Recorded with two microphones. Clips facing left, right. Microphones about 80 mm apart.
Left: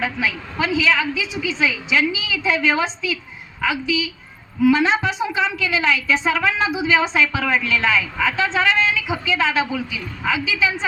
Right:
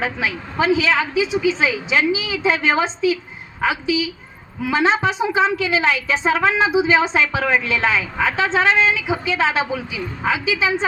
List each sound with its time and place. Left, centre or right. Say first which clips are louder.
0.0 s a woman's voice: even; right